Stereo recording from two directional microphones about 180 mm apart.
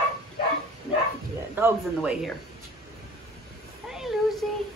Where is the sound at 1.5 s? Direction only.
10° right (ahead or behind).